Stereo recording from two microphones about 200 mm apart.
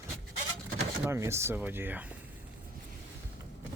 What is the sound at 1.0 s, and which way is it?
Speech, 15° right (ahead or behind).